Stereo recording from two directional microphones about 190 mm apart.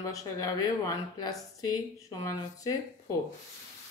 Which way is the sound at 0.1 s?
15° left (ahead or behind).